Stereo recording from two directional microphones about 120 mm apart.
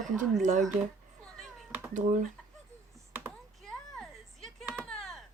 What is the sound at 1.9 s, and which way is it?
Speech, 90° right.